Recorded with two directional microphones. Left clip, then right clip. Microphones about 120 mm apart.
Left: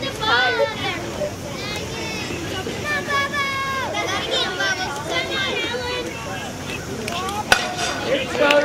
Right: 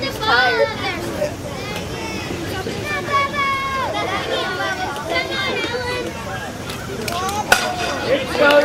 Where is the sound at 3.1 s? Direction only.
45° left (ahead or behind).